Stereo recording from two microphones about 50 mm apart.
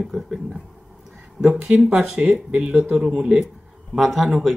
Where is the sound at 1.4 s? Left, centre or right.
Right.